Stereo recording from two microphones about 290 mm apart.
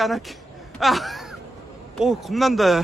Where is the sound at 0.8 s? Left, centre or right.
Centre.